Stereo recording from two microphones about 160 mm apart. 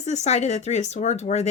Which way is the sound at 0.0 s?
45° left (ahead or behind).